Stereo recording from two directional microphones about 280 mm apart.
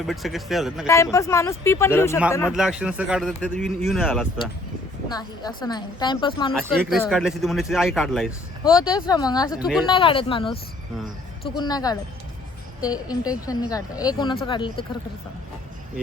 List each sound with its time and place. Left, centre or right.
0.1 s speech: centre
0.9 s a woman's voice: centre
2.5 s speech: centre
5.1 s a woman's voice: centre
6.5 s speech: centre
8.9 s a woman's voice: centre
9.6 s speech: centre
9.8 s a woman's voice: centre